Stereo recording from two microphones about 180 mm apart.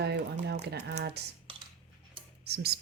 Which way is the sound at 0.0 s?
65° right (ahead or behind).